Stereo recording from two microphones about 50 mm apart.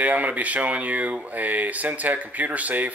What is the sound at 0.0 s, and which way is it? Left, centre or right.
Speech, right.